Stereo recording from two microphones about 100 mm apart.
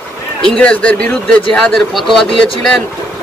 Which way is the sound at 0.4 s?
10° left (ahead or behind).